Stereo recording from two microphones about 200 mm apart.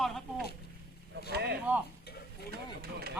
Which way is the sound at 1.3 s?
55° right (ahead or behind).